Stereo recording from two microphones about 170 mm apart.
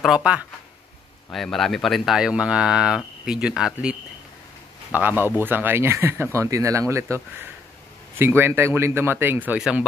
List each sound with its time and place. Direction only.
0.0 s speech: 5° right (ahead or behind)
4.9 s speech: 10° right (ahead or behind)
8.2 s speech: 15° right (ahead or behind)